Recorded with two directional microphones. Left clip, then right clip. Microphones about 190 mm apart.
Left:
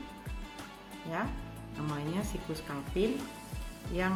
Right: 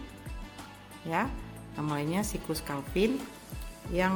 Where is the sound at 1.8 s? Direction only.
35° right (ahead or behind).